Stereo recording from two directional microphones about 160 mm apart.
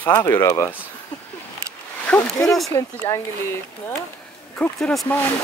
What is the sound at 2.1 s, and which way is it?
Speech, 5° left (ahead or behind).